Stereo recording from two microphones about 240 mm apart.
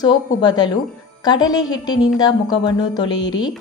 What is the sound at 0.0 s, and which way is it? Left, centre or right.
A woman's voice, centre.